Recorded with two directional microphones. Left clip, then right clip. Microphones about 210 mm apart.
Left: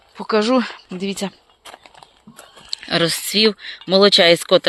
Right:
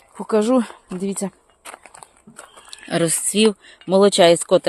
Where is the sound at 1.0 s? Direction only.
20° right (ahead or behind).